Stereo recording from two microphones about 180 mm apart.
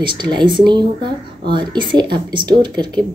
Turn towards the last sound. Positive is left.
turn(degrees=-25)  # may be behind; listen again after turning